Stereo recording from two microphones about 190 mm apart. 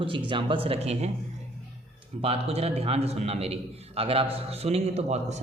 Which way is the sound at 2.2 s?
30° right (ahead or behind).